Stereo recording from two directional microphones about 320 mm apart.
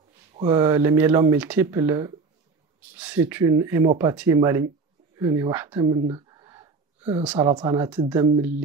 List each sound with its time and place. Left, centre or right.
0.3 s speech: centre